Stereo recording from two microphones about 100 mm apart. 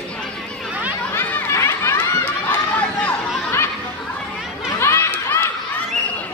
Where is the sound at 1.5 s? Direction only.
30° left (ahead or behind).